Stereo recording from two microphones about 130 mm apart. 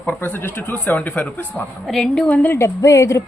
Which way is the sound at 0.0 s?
15° left (ahead or behind).